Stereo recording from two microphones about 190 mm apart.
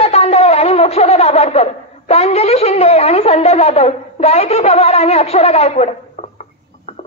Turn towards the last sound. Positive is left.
turn(degrees=35)  # may be behind; listen again after turning